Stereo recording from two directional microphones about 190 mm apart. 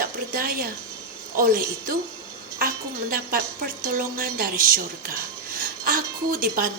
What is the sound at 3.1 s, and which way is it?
A woman's voice, 50° right (ahead or behind).